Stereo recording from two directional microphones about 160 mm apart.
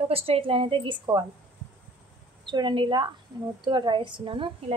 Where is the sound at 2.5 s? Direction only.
30° right (ahead or behind).